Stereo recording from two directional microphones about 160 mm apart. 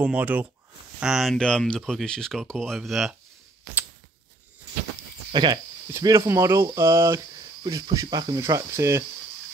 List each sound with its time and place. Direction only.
0.0 s speech: 10° right (ahead or behind)
5.3 s speech: 30° right (ahead or behind)
5.9 s speech: 20° right (ahead or behind)